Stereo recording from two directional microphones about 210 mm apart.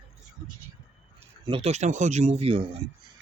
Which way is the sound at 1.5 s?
30° right (ahead or behind).